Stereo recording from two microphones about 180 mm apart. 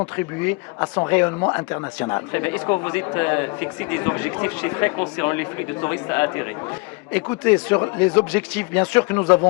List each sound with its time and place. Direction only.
0.2 s speech: 10° left (ahead or behind)